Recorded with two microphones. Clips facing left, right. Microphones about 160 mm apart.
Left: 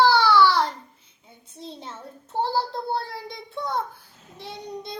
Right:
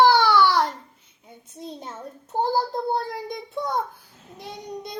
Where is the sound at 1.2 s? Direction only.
15° right (ahead or behind).